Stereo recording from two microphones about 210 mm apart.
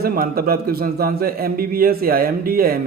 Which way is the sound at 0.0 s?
45° right (ahead or behind).